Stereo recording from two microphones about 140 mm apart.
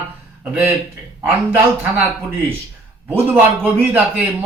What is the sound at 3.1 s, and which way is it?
Speech, 15° right (ahead or behind).